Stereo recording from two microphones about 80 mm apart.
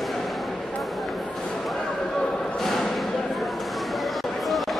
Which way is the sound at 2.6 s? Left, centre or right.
Centre.